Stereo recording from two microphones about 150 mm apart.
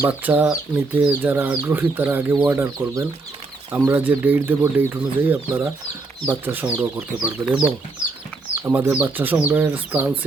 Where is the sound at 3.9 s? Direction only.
10° right (ahead or behind).